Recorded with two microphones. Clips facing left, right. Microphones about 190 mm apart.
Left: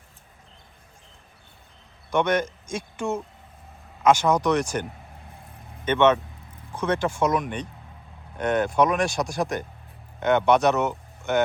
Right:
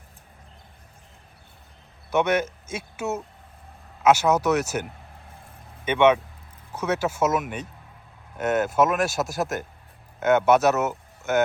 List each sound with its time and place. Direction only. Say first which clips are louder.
2.0 s speech: even; 5° right (ahead or behind)